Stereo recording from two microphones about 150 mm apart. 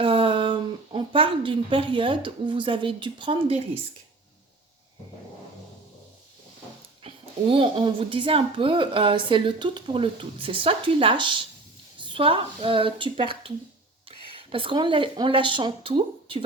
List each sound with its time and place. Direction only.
0.0 s speech: 35° right (ahead or behind)
7.0 s a woman's voice: 35° right (ahead or behind)